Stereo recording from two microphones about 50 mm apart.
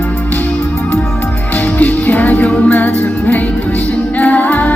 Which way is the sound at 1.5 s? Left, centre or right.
Left.